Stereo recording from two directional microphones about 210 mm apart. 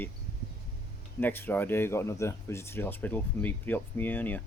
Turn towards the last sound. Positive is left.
turn(degrees=10)  # may be behind; listen again after turning